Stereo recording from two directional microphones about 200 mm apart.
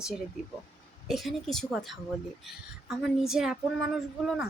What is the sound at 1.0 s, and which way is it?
Speech, centre (ahead or behind).